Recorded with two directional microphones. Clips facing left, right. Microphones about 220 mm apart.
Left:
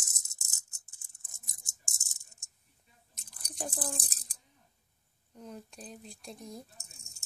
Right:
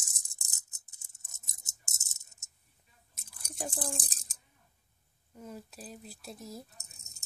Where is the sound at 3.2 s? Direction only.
5° right (ahead or behind).